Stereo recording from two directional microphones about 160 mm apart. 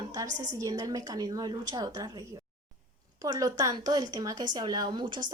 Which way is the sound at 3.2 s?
25° right (ahead or behind).